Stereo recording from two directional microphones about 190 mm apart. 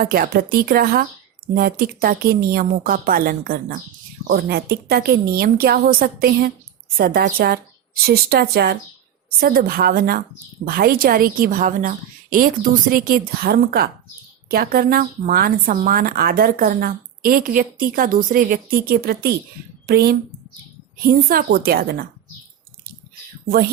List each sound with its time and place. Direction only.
0.0 s a woman's voice: 50° right (ahead or behind)